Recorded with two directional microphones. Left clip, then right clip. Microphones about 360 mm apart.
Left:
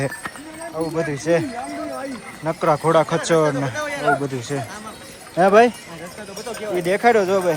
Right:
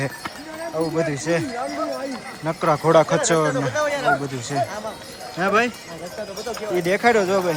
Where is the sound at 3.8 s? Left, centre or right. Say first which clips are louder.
Right 2 dB; right.